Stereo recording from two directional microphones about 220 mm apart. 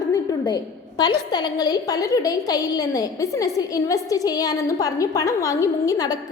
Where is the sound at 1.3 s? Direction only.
20° left (ahead or behind).